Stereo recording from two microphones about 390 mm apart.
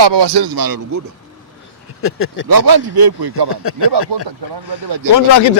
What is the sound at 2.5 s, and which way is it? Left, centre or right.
Speech, right.